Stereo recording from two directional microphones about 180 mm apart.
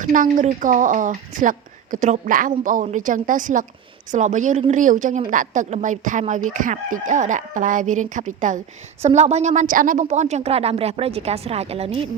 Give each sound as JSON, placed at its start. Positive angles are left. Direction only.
{"t": 0.0, "sound": "a woman's voice", "side_deg": -50}